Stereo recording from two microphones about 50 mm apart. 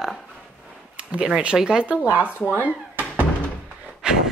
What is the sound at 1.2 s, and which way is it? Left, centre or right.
Speech, centre.